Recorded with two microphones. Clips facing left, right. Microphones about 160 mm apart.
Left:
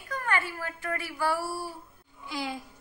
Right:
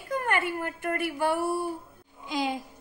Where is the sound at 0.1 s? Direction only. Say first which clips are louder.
Right 3 dB; 20° right (ahead or behind).